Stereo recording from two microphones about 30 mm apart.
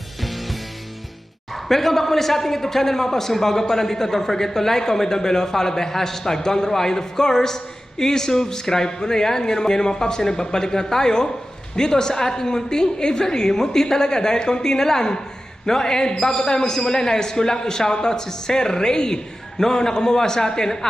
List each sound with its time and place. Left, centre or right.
0.2 s music: centre
1.5 s a man's voice: centre